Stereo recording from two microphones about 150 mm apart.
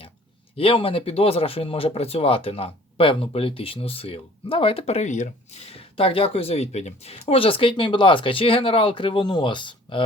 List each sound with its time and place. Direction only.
0.5 s speech: 40° left (ahead or behind)